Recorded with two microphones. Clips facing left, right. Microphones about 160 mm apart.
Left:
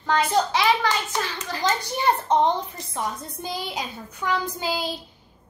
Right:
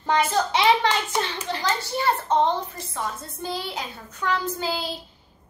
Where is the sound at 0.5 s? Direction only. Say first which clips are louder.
Right 2 dB; 20° right (ahead or behind).